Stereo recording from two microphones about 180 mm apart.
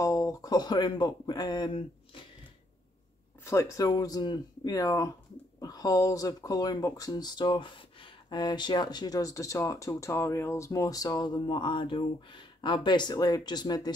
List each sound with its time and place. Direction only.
0.0 s speech: 20° left (ahead or behind)
3.4 s speech: 15° left (ahead or behind)